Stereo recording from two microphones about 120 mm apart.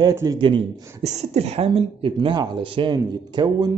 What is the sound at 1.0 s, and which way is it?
Speech, 70° right (ahead or behind).